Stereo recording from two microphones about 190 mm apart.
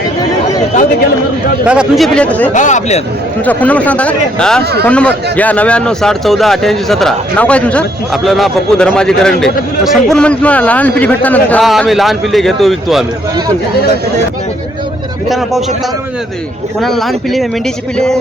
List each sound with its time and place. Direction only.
1.6 s speech: 5° right (ahead or behind)
2.5 s speech: 40° left (ahead or behind)
3.4 s speech: 10° left (ahead or behind)
16.8 s speech: centre (ahead or behind)